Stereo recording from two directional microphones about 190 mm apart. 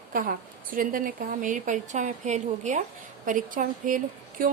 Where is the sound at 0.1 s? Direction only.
50° right (ahead or behind).